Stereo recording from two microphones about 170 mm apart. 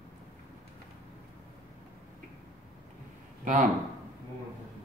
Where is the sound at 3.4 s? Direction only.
50° right (ahead or behind).